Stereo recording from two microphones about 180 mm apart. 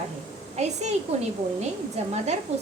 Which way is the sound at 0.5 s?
40° right (ahead or behind).